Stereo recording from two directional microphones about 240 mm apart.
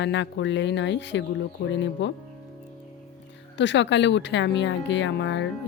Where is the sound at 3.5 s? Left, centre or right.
Left.